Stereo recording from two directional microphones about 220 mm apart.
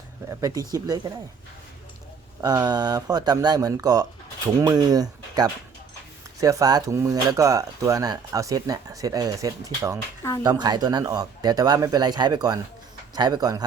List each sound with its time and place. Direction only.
0.3 s speech: 15° right (ahead or behind)
2.4 s speech: 20° right (ahead or behind)